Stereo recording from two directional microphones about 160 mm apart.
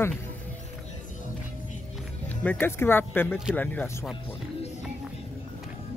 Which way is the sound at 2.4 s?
15° left (ahead or behind).